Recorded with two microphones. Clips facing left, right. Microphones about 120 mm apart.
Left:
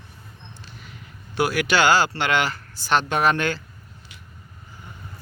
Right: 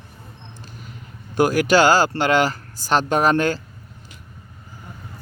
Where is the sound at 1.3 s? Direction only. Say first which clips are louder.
Right 5 dB; 40° right (ahead or behind).